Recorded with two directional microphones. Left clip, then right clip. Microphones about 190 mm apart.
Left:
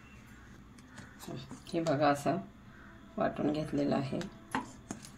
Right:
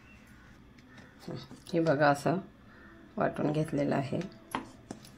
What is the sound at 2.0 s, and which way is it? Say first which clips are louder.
Speech: right 3 dB; 35° right (ahead or behind).